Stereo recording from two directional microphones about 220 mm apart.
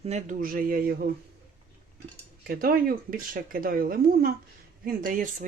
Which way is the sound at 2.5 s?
40° right (ahead or behind).